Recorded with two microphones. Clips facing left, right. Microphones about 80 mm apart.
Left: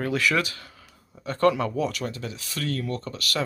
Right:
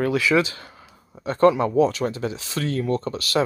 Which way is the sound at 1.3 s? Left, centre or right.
Right.